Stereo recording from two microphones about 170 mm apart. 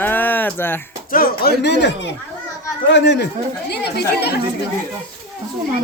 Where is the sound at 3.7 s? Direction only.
75° left (ahead or behind).